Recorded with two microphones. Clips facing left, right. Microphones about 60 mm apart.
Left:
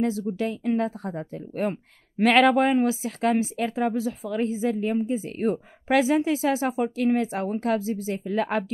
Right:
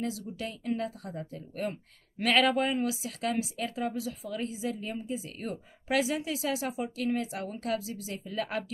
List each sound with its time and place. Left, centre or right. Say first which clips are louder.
0.0 s speech: left 10 dB; left